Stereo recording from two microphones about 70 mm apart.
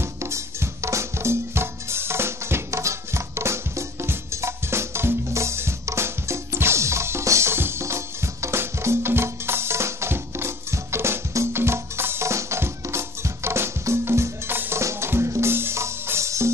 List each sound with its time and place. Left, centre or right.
0.0 s music: right